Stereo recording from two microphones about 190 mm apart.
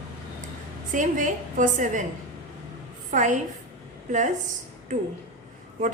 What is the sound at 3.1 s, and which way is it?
A woman's voice, 40° right (ahead or behind).